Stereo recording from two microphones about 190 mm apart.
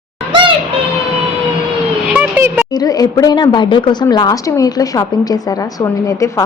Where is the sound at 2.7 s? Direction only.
20° left (ahead or behind).